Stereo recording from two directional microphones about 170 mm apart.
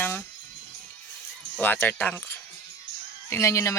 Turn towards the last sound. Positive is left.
turn(degrees=20)  # may be behind; listen again after turning